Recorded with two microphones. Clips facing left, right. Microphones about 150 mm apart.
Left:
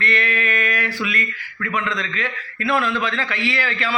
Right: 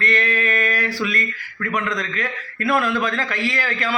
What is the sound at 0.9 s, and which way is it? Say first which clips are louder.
A man's voice: right 1 dB; 40° right (ahead or behind).